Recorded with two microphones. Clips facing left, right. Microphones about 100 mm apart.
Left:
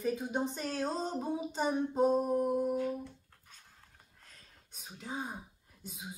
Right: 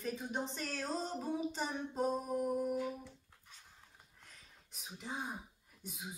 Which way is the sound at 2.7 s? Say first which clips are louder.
Left 5 dB; centre (ahead or behind).